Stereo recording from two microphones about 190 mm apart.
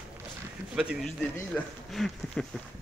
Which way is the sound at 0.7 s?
5° right (ahead or behind).